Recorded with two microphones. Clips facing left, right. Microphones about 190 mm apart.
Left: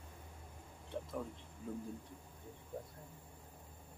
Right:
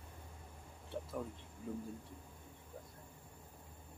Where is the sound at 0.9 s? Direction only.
5° right (ahead or behind).